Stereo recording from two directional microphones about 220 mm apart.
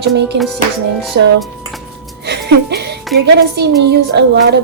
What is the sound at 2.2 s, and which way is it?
Music, 50° right (ahead or behind).